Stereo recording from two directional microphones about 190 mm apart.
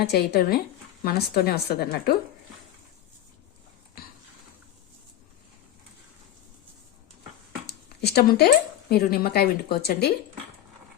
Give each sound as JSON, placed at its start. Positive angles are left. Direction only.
{"t": 0.0, "sound": "a woman's voice", "side_deg": 55}
{"t": 7.7, "sound": "a sound", "side_deg": 60}
{"t": 8.9, "sound": "a woman's voice", "side_deg": 55}